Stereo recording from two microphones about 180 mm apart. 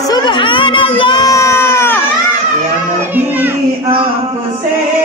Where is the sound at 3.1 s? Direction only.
10° right (ahead or behind).